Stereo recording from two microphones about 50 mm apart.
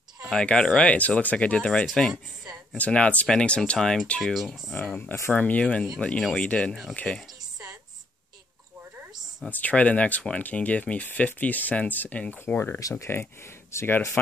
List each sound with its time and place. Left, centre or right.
0.3 s speech: centre
3.7 s speech: centre
4.2 s speech: centre
4.8 s speech: left
7.0 s speech: centre
9.5 s speech: left
12.5 s speech: left